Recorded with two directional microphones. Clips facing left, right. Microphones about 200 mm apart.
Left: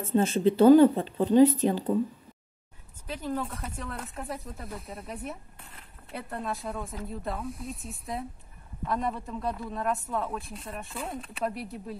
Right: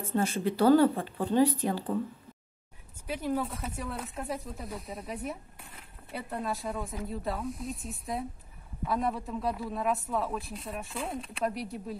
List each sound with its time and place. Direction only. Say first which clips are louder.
0.0 s speech: left 5 dB; 25° left (ahead or behind)
3.1 s speech: right 1 dB; 10° right (ahead or behind)